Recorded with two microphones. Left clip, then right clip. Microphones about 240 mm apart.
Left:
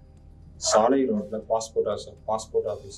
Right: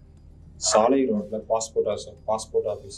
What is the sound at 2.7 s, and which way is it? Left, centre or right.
Speech, centre.